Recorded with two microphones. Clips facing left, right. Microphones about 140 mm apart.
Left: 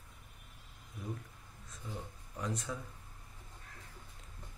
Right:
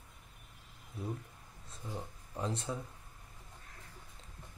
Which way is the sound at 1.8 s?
30° right (ahead or behind).